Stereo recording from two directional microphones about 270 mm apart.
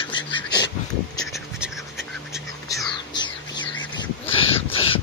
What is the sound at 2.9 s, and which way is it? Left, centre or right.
Bird, centre.